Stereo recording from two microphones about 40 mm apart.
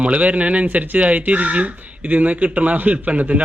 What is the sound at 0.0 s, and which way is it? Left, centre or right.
Speech, right.